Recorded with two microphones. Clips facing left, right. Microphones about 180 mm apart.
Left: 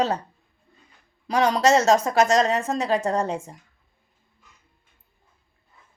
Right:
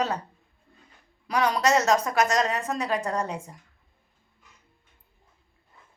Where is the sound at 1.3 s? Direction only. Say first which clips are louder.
Left 4 dB; 25° left (ahead or behind).